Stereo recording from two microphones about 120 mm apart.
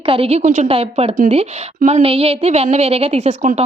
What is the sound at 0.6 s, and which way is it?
A woman's voice, 55° right (ahead or behind).